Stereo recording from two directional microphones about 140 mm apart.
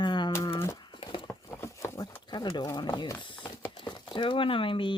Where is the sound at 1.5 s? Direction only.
20° left (ahead or behind).